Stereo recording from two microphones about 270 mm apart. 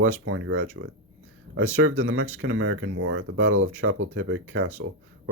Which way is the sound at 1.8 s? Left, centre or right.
Right.